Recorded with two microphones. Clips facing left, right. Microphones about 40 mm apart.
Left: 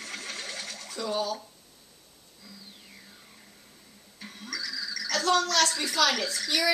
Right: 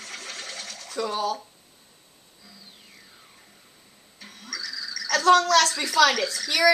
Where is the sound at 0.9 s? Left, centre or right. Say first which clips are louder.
Right 4 dB; right.